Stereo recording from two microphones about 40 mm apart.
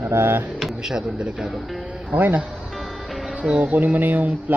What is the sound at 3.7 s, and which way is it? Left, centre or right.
Speech, right.